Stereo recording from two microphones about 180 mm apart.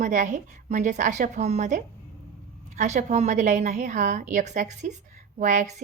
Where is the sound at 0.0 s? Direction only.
45° right (ahead or behind).